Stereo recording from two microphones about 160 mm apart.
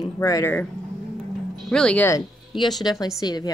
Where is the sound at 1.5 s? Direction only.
5° left (ahead or behind).